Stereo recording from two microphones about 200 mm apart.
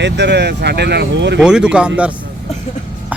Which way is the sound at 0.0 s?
60° right (ahead or behind).